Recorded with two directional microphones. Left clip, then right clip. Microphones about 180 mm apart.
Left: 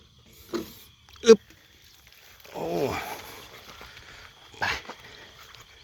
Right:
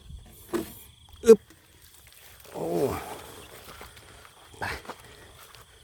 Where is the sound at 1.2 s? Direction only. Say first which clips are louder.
Even; 20° right (ahead or behind).